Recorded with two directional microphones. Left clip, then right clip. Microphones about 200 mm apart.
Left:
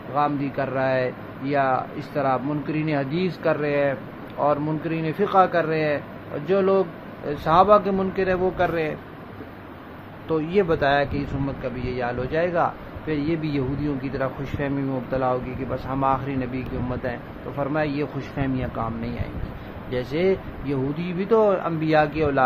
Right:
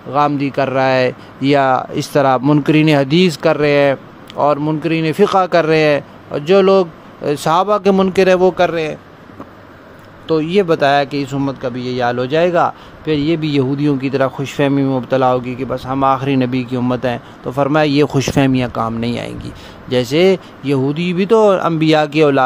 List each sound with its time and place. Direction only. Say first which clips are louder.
0.1 s speech: right 8 dB; 60° right (ahead or behind); by 8.9 s 40° right (ahead or behind)
10.2 s speech: right 8 dB; 40° right (ahead or behind); by 22.4 s 55° right (ahead or behind)